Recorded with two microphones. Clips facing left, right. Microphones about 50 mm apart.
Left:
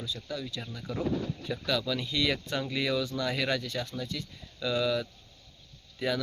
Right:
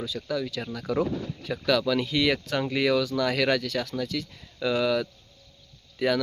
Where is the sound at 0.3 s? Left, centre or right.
Right.